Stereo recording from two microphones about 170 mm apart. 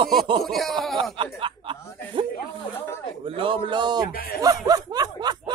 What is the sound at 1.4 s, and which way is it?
Chuckle, 30° right (ahead or behind).